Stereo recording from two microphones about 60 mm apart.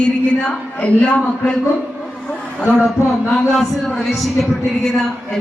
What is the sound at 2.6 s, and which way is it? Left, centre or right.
Speech, centre.